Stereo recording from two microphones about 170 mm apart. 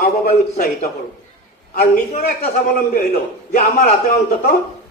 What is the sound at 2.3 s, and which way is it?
A man's voice, 60° left (ahead or behind).